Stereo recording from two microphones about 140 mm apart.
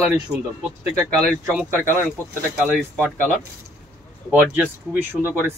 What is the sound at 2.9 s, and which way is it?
Speech, 10° right (ahead or behind).